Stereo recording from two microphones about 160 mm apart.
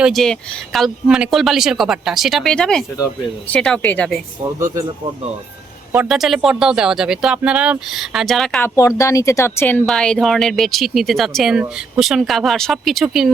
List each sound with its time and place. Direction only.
0.0 s speech: centre (ahead or behind)
5.9 s speech: 5° right (ahead or behind)
8.6 s speech: 20° left (ahead or behind); by 13.3 s centre (ahead or behind)